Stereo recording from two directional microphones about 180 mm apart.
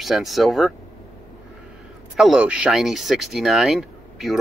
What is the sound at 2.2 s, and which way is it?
Speech, 5° right (ahead or behind).